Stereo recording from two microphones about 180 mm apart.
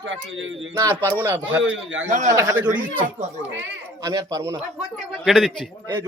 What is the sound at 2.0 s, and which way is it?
Speech, 40° right (ahead or behind).